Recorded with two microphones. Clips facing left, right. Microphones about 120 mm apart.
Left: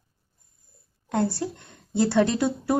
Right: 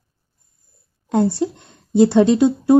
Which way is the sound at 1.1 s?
20° right (ahead or behind).